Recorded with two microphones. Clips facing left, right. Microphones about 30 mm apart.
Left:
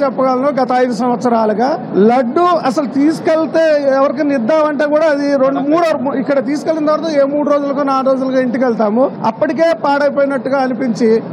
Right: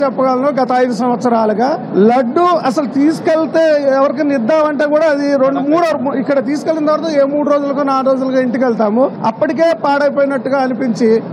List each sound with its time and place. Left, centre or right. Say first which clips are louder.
0.0 s a man's voice: even; centre
4.4 s a man's voice: even; centre
4.8 s a man's voice: even; centre